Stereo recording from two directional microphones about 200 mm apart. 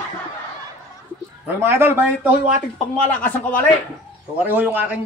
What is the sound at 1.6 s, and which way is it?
Speech, 10° right (ahead or behind).